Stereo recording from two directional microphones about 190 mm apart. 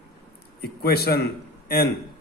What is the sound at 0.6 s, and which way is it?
Speech, 55° left (ahead or behind).